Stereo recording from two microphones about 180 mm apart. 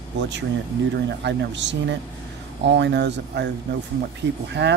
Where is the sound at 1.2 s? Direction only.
75° right (ahead or behind).